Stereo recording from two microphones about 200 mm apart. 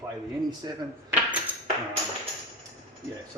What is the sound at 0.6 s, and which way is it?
Speech, 20° right (ahead or behind).